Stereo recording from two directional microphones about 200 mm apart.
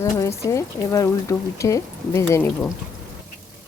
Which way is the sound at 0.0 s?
15° left (ahead or behind).